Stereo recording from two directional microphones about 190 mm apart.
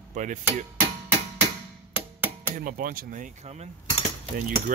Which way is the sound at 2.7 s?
45° right (ahead or behind).